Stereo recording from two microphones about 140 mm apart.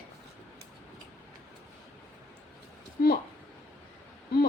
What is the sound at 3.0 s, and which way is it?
Speech, 90° left.